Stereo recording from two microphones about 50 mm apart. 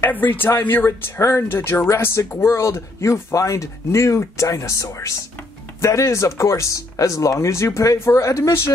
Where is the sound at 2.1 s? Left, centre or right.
Left.